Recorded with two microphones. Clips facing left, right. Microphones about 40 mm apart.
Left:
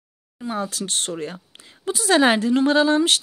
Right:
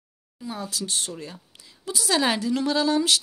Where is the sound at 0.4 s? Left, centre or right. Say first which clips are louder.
Left 5 dB; left.